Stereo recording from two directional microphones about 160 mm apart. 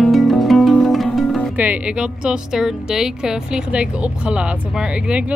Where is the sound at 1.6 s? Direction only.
10° right (ahead or behind).